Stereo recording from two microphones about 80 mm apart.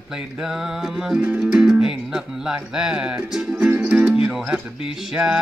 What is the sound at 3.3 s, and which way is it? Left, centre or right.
Speech, centre.